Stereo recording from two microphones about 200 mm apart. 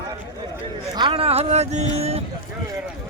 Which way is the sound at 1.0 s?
25° right (ahead or behind).